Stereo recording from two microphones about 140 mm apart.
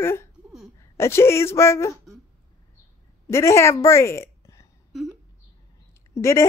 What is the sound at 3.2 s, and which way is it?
A woman's voice, 20° left (ahead or behind).